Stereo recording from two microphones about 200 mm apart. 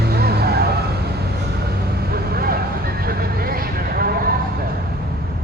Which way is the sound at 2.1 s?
50° right (ahead or behind).